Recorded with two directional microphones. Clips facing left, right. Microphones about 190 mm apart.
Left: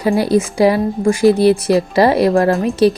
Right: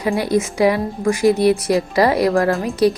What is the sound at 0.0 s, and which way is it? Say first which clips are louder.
A woman's voice: left 4 dB; 30° left (ahead or behind).